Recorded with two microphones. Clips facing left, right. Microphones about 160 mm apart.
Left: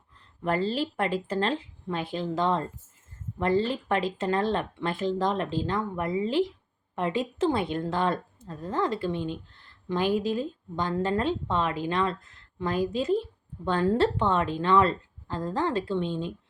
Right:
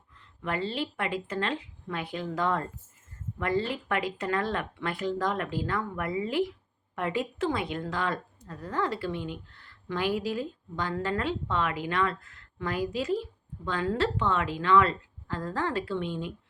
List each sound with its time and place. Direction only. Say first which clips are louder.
0.4 s a woman's voice: left 4 dB; 35° left (ahead or behind)